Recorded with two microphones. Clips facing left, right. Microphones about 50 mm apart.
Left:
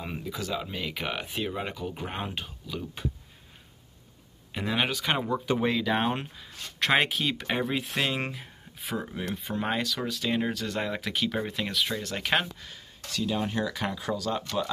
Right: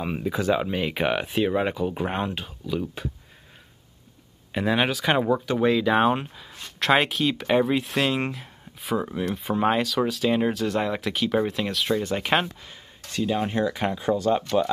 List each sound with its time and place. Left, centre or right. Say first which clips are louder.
0.2 s speech: right 11 dB; right
1.5 s speech: right 9 dB; right
2.3 s speech: right 7 dB; centre
4.5 s speech: right 5 dB; centre
11.9 s speech: right 5 dB; centre